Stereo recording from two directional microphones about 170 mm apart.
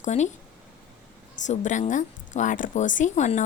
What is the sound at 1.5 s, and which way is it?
A woman's voice, 45° left (ahead or behind).